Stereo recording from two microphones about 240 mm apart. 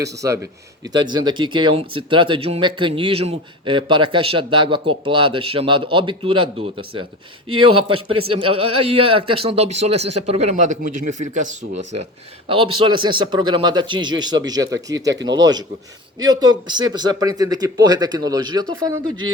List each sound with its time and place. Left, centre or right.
0.0 s a man's voice: centre